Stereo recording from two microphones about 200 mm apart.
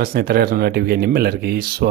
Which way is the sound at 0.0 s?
50° right (ahead or behind).